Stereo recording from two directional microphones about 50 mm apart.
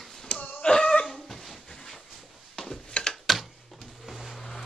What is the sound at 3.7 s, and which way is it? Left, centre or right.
Printer, centre.